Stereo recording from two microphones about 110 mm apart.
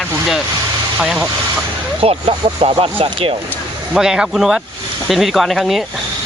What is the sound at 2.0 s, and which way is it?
Speech, 60° right (ahead or behind).